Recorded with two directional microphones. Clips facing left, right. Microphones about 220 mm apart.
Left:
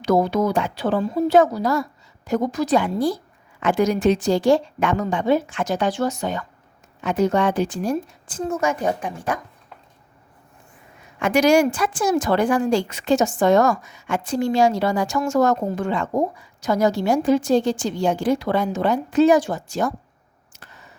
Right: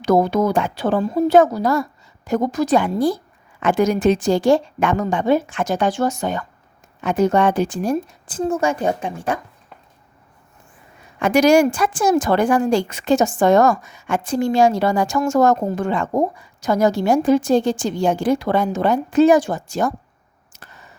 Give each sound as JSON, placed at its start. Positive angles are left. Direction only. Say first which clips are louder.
{"t": 0.0, "sound": "a woman's voice", "louder": "right 2 dB", "side_deg": -50}
{"t": 8.3, "sound": "a woman's voice", "louder": "right 3 dB", "side_deg": -35}
{"t": 11.2, "sound": "a woman's voice", "louder": "right 3 dB", "side_deg": -40}